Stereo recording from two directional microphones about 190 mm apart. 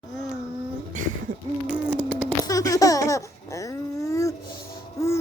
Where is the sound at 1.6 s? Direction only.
10° right (ahead or behind).